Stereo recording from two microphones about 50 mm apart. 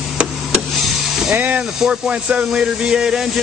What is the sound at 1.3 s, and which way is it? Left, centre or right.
Speech, right.